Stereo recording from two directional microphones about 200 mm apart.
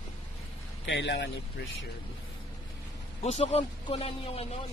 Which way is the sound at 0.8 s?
55° left (ahead or behind).